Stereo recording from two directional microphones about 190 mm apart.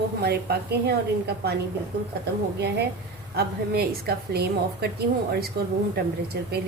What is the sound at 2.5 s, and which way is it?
A woman's voice, 60° right (ahead or behind).